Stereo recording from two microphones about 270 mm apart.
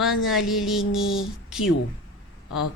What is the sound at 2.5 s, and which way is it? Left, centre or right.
Speech, left.